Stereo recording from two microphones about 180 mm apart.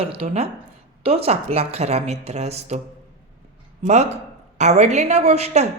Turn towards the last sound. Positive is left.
turn(degrees=-35)  # may be behind; listen again after turning